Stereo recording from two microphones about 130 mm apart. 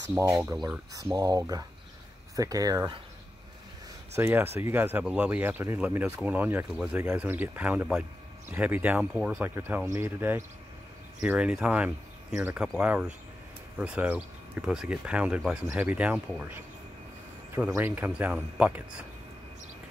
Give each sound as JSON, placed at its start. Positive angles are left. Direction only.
{"t": 0.1, "sound": "speech", "side_deg": -25}
{"t": 4.2, "sound": "speech", "side_deg": -15}
{"t": 7.0, "sound": "speech", "side_deg": -15}
{"t": 9.8, "sound": "speech", "side_deg": -20}
{"t": 11.1, "sound": "speech", "side_deg": -10}
{"t": 17.6, "sound": "speech", "side_deg": -15}